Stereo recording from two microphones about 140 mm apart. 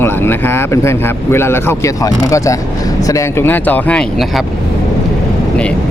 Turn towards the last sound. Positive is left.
turn(degrees=0)  # may be behind; listen again after turning